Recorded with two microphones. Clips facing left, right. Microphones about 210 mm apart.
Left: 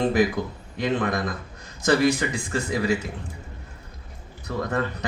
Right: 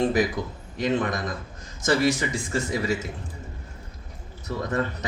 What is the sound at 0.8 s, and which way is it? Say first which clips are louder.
Speech: left 1 dB; 55° left (ahead or behind).